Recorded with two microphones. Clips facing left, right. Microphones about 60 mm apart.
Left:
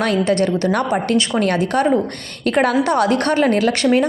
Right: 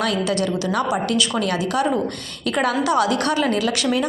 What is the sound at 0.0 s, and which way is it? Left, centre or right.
A woman's voice, left.